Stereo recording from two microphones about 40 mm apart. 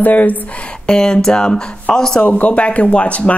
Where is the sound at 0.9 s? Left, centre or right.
Centre.